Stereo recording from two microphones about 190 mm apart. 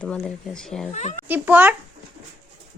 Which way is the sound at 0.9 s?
35° left (ahead or behind).